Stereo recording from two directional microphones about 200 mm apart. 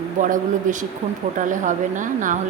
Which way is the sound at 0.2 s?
40° right (ahead or behind).